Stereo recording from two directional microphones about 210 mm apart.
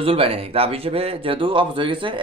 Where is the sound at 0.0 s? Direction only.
25° right (ahead or behind).